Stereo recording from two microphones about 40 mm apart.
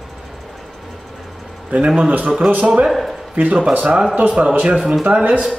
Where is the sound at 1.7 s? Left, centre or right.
Right.